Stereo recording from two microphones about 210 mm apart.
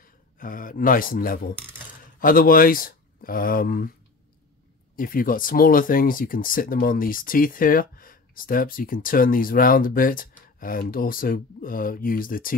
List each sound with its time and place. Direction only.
0.0 s a man's voice: 40° left (ahead or behind)
4.9 s speech: 40° left (ahead or behind)